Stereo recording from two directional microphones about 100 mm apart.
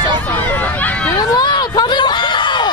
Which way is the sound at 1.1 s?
40° left (ahead or behind).